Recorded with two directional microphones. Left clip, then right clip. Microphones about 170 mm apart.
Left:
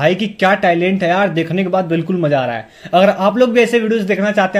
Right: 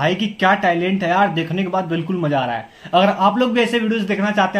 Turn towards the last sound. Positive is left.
turn(degrees=40)  # may be behind; listen again after turning